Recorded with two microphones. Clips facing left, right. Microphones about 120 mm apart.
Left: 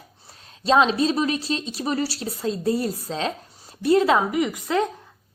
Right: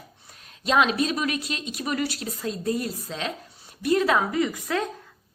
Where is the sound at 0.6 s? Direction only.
30° left (ahead or behind).